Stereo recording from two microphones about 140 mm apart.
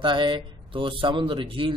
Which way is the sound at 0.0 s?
35° right (ahead or behind).